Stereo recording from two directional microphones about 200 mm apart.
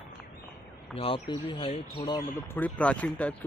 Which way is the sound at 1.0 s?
25° left (ahead or behind).